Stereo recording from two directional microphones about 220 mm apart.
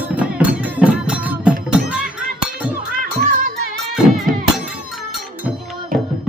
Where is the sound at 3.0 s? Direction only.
40° right (ahead or behind).